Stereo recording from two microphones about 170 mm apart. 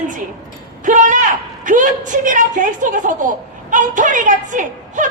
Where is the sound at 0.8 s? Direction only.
50° right (ahead or behind).